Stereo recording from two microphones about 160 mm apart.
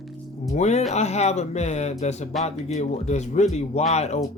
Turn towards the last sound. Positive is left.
turn(degrees=45)  # may be behind; listen again after turning